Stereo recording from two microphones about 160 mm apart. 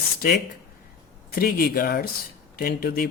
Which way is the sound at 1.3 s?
70° left (ahead or behind).